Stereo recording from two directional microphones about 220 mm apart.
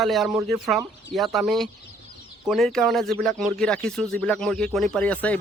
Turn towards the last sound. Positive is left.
turn(degrees=5)  # may be behind; listen again after turning